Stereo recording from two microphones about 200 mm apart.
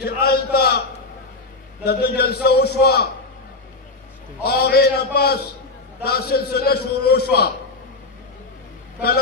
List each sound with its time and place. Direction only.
0.0 s a man's voice: 50° left (ahead or behind)
1.9 s a man's voice: 55° left (ahead or behind)
4.4 s a man's voice: 55° left (ahead or behind)